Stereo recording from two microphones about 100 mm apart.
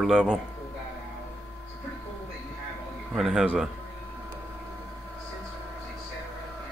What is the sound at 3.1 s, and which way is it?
Speech, 5° right (ahead or behind).